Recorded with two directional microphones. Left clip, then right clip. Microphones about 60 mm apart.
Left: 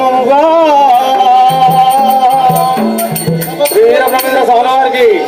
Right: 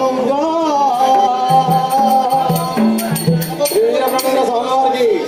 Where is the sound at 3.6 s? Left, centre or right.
Left.